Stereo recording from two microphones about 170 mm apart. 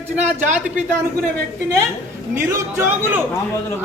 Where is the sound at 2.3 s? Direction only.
15° right (ahead or behind).